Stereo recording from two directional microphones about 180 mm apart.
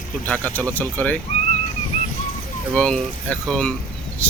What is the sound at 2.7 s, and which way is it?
Speech, 5° left (ahead or behind).